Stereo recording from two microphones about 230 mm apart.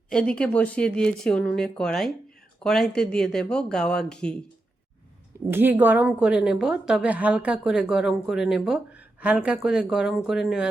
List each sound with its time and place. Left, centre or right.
0.1 s a woman's voice: centre
5.5 s a woman's voice: centre